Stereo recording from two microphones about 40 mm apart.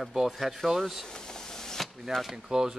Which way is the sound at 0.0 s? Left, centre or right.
Centre.